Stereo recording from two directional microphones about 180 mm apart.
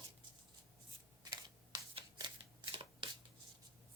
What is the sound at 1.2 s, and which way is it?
Shuffling cards, 25° right (ahead or behind).